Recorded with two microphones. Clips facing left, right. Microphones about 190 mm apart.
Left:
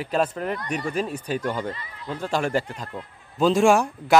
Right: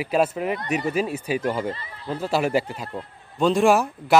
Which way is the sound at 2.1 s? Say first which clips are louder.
Right 2 dB; 5° right (ahead or behind).